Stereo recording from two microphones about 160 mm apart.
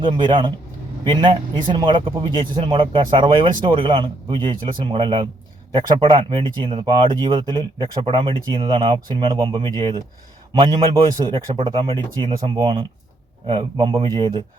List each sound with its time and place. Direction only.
0.0 s speech: 30° right (ahead or behind)